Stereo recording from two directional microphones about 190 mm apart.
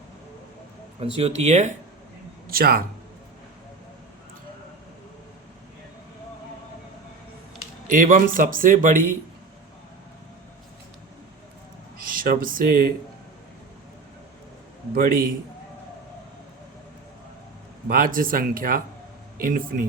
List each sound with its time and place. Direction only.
1.2 s speech: 35° right (ahead or behind)
2.5 s speech: 50° right (ahead or behind)
7.9 s speech: 45° right (ahead or behind)
12.1 s speech: 50° right (ahead or behind)
14.9 s speech: 50° right (ahead or behind)
17.8 s speech: 50° right (ahead or behind)